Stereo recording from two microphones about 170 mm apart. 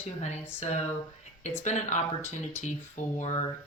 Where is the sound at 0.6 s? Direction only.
40° left (ahead or behind).